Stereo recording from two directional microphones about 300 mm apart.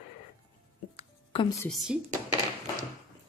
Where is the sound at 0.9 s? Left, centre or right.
Centre.